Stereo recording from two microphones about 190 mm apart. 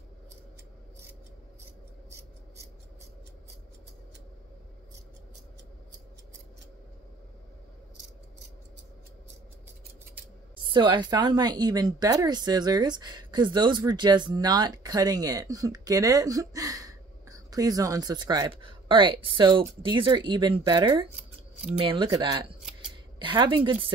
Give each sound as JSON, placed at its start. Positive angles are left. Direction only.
{"t": 2.0, "sound": "scissors", "side_deg": -15}
{"t": 10.6, "sound": "a woman's voice", "side_deg": -25}